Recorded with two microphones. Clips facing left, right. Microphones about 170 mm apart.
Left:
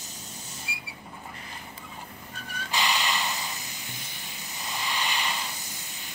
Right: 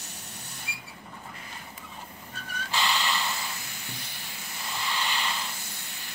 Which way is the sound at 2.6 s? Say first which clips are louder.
Even; 15° left (ahead or behind).